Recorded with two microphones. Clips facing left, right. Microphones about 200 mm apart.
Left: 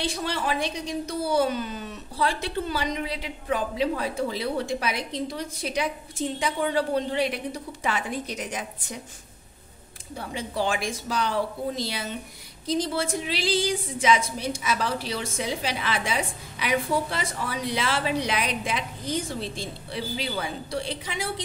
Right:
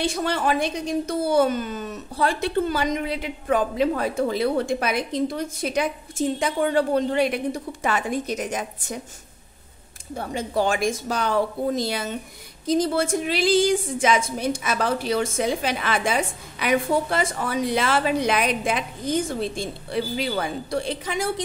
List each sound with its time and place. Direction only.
0.0 s speech: 50° right (ahead or behind)
10.1 s speech: 45° right (ahead or behind)